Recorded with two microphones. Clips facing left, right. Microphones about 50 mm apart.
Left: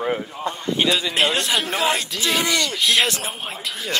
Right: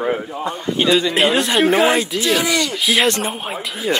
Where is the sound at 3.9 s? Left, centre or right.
Centre.